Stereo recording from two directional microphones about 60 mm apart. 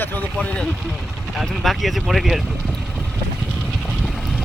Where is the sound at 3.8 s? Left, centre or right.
Centre.